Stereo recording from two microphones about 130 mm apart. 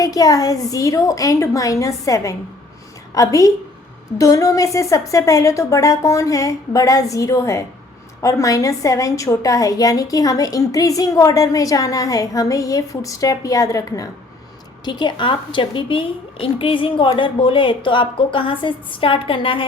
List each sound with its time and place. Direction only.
0.0 s a woman's voice: 25° left (ahead or behind)